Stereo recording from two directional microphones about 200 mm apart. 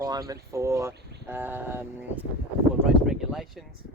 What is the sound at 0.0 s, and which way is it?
Speech, 20° right (ahead or behind).